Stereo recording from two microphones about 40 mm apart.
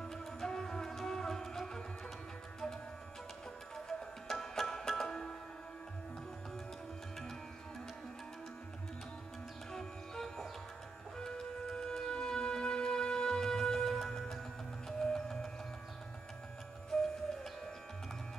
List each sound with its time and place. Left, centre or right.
0.0 s music: centre
4.3 s music: centre
9.7 s music: centre
16.9 s music: centre